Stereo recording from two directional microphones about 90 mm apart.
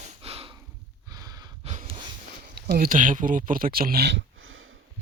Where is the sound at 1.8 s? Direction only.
90° right.